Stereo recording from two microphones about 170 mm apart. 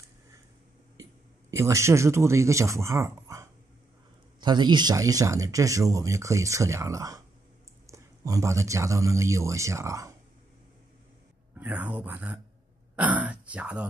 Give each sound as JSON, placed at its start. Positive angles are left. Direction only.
{"t": 1.5, "sound": "speech", "side_deg": -20}
{"t": 11.6, "sound": "speech", "side_deg": -10}